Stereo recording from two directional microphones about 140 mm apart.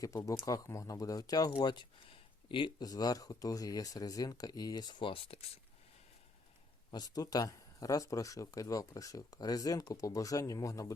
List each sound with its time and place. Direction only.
0.0 s speech: 25° left (ahead or behind); by 5.5 s 45° left (ahead or behind)
6.9 s speech: 30° left (ahead or behind)